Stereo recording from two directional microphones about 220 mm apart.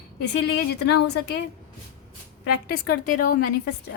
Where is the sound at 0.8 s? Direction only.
50° left (ahead or behind).